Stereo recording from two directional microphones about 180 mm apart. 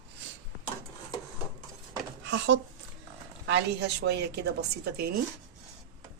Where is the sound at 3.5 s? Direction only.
75° right (ahead or behind).